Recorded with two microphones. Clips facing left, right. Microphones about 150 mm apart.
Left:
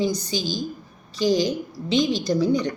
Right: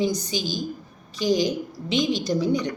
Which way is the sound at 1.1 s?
35° left (ahead or behind).